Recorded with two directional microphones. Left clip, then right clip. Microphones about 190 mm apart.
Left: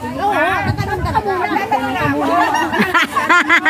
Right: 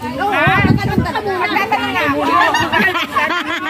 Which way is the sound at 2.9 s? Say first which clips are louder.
Left 3 dB; 25° left (ahead or behind).